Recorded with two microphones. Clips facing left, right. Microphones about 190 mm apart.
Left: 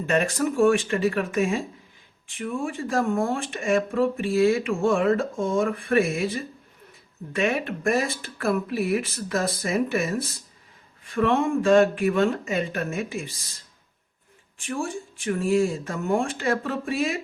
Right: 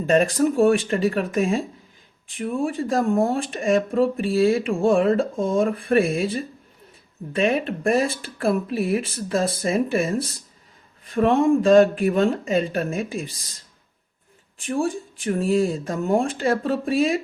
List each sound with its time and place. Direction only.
0.0 s speech: 35° right (ahead or behind)
14.7 s speech: 35° right (ahead or behind)